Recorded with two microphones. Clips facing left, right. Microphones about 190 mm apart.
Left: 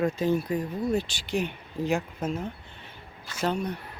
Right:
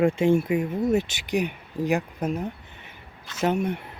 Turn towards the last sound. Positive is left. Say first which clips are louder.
# right 4 dB
turn(degrees=-25)  # may be behind; listen again after turning